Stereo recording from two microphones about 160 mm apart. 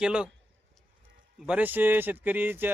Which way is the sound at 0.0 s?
5° right (ahead or behind).